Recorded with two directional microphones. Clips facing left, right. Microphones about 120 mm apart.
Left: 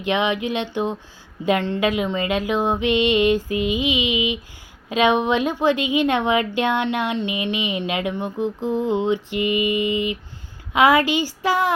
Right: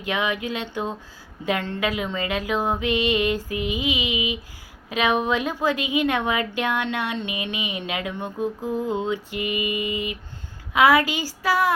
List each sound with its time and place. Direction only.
0.0 s a woman's voice: 25° left (ahead or behind)